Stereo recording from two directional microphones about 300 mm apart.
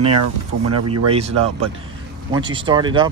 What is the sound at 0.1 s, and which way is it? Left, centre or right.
Speech, right.